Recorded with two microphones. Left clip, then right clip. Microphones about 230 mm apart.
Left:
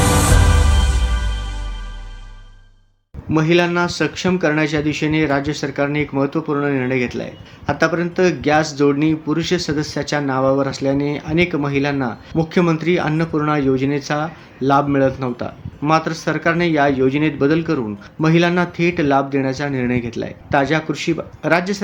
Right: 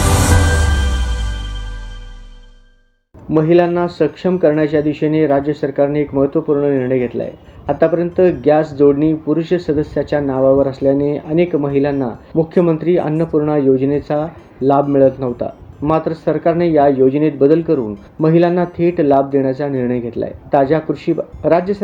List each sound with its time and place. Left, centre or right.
3.3 s speech: centre